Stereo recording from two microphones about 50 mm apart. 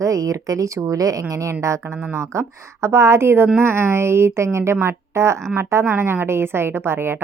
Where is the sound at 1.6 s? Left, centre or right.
Right.